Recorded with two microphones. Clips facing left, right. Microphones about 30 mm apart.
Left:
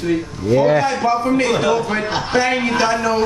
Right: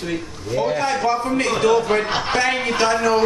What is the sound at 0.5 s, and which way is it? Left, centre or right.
A man's voice, left.